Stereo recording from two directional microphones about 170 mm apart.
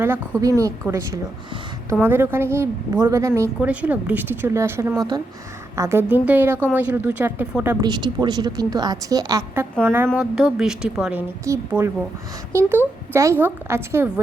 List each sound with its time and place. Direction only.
0.0 s a woman's voice: 15° right (ahead or behind)
7.9 s a woman's voice: 25° right (ahead or behind); by 11.2 s 5° right (ahead or behind)
11.4 s a woman's voice: 15° right (ahead or behind)